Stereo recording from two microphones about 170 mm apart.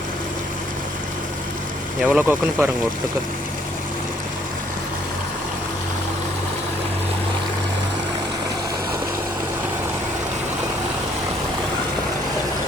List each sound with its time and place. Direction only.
2.0 s speech: 5° right (ahead or behind)